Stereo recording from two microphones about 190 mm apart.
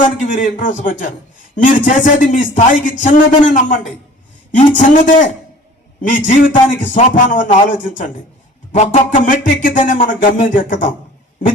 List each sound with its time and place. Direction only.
0.2 s speech: 40° left (ahead or behind)
4.8 s speech: 45° left (ahead or behind)